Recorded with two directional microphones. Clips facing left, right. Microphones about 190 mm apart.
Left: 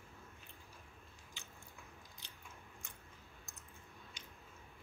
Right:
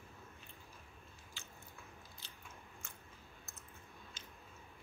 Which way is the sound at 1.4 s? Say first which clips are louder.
Even; 15° left (ahead or behind).